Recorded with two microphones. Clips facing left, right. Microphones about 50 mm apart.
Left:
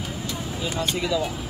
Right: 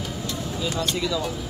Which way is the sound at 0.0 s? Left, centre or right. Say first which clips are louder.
Right 1 dB; left.